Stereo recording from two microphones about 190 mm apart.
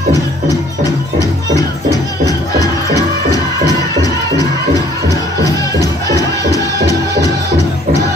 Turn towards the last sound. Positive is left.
turn(degrees=20)  # may be behind; listen again after turning